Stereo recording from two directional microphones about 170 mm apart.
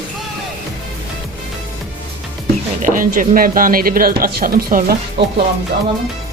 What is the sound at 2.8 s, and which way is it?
Speech, 55° right (ahead or behind).